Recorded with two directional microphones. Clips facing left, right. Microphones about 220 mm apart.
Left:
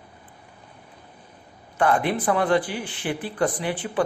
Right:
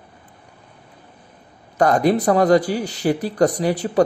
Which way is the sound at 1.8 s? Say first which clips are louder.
Right 6 dB; 40° right (ahead or behind).